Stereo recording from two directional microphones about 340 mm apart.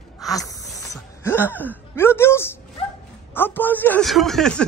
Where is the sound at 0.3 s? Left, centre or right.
Centre.